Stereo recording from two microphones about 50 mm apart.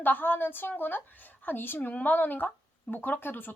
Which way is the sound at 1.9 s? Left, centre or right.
Left.